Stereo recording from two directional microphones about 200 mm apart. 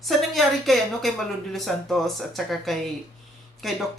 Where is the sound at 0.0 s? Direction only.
Centre (ahead or behind).